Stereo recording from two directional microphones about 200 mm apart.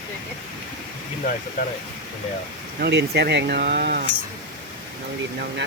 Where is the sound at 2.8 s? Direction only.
55° right (ahead or behind).